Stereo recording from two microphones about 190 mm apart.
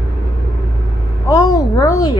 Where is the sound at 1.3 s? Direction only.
20° left (ahead or behind).